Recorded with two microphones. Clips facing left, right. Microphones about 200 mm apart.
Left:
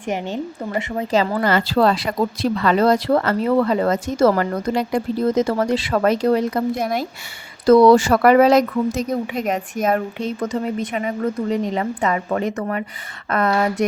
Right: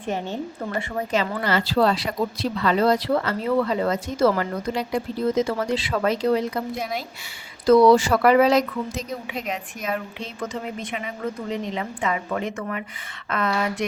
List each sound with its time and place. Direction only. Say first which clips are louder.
0.1 s a woman's voice: left 3 dB; 15° left (ahead or behind)
1.1 s speech: left 5 dB; 40° left (ahead or behind); by 2.5 s 55° left (ahead or behind)
2.6 s speech: left 3 dB; 80° left
2.8 s speech: left 4 dB; 50° left (ahead or behind)